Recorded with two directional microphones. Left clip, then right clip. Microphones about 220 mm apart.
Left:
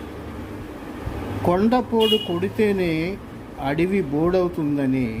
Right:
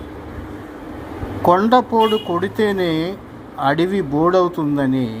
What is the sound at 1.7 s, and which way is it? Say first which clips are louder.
Speech: right 5 dB; centre (ahead or behind).